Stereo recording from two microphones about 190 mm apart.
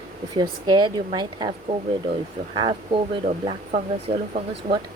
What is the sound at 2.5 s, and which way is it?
Speech, 25° right (ahead or behind).